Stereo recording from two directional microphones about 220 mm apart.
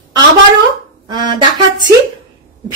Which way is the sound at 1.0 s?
20° right (ahead or behind).